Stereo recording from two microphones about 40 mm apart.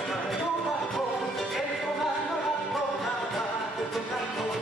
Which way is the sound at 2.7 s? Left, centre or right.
Centre.